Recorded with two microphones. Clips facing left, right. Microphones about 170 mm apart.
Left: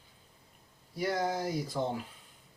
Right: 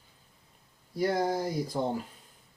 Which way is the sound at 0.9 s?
45° right (ahead or behind).